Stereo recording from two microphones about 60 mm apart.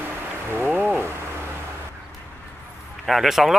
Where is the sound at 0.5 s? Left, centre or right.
Right.